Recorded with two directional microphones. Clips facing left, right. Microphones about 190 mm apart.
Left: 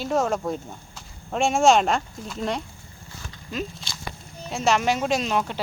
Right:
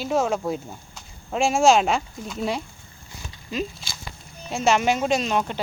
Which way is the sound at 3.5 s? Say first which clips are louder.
Right 2 dB; 5° right (ahead or behind).